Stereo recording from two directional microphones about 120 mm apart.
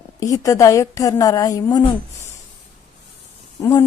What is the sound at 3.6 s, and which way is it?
Speech, 25° left (ahead or behind).